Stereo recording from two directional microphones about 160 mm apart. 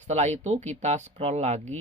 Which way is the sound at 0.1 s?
45° right (ahead or behind).